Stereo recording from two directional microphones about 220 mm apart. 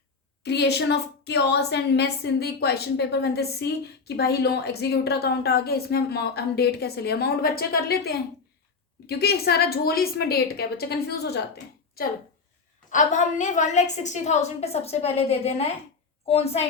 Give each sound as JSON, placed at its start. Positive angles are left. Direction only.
{"t": 0.4, "sound": "a woman's voice", "side_deg": 50}
{"t": 12.9, "sound": "a woman's voice", "side_deg": 35}